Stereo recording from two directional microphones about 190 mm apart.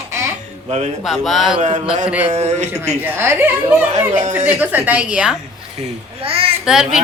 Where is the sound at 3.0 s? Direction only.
10° right (ahead or behind).